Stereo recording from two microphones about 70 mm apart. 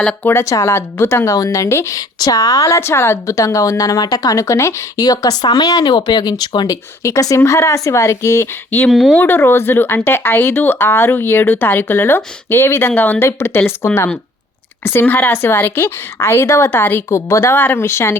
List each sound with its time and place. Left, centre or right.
0.2 s speech: left
0.4 s speech: left
2.0 s speech: left
2.6 s speech: left
3.3 s speech: left
4.9 s speech: left
7.0 s speech: left
8.9 s speech: centre
9.1 s speech: left
13.1 s speech: left
15.0 s speech: left
17.1 s speech: left
17.5 s speech: left